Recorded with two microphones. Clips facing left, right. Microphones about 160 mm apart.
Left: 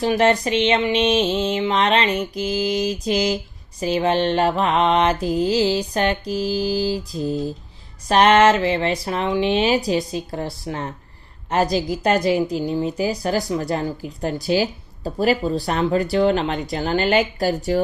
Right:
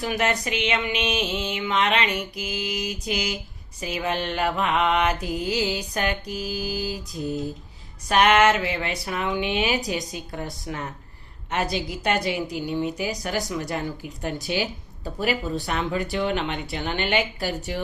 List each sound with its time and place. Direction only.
0.0 s speech: 30° left (ahead or behind)